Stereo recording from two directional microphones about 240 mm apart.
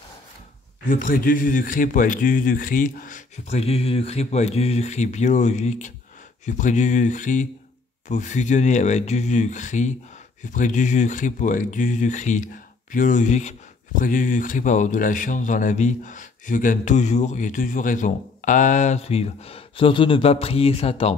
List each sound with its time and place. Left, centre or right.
0.8 s speech: left